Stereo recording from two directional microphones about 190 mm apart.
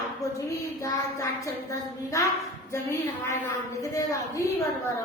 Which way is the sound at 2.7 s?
15° left (ahead or behind).